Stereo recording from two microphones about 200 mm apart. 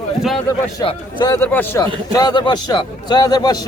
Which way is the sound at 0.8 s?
20° left (ahead or behind).